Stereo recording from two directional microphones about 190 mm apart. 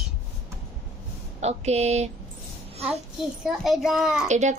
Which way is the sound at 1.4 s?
35° right (ahead or behind).